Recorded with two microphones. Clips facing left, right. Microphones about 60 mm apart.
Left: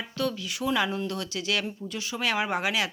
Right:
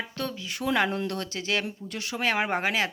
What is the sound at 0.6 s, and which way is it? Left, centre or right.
Speech, right.